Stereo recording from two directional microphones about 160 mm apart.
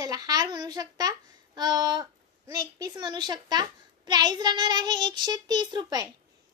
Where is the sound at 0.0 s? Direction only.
25° right (ahead or behind).